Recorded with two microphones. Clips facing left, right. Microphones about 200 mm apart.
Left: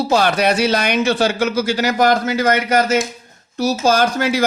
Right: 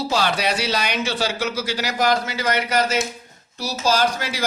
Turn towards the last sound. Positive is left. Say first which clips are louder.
# left 6 dB
turn(degrees=50)  # may be behind; listen again after turning